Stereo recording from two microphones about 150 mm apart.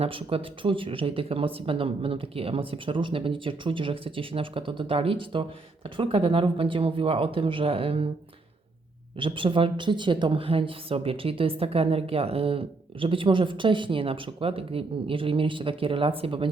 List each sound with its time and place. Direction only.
0.0 s speech: 35° right (ahead or behind)
9.1 s speech: 35° right (ahead or behind)